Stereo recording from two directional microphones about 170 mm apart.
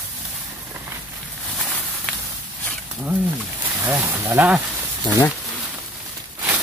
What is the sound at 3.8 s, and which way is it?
Speech, 15° right (ahead or behind).